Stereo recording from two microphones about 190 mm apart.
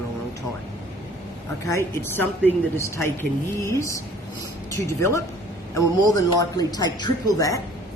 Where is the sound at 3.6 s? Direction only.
15° left (ahead or behind).